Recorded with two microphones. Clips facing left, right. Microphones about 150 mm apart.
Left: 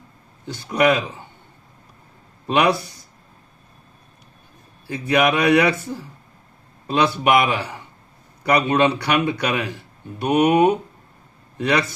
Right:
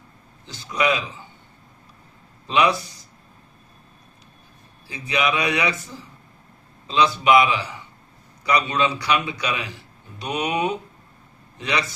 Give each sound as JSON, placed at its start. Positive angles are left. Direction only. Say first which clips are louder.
{"t": 0.4, "sound": "a man's voice", "louder": "left 5 dB", "side_deg": 55}
{"t": 2.5, "sound": "a man's voice", "louder": "left 2 dB", "side_deg": 60}
{"t": 4.9, "sound": "a man's voice", "louder": "left 5 dB", "side_deg": 55}